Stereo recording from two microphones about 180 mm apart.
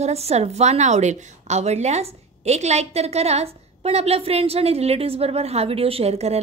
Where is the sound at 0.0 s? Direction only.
35° right (ahead or behind).